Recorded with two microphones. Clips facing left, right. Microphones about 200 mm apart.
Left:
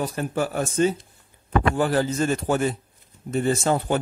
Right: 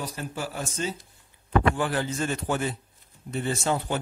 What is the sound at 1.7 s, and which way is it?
A man's voice, 40° left (ahead or behind).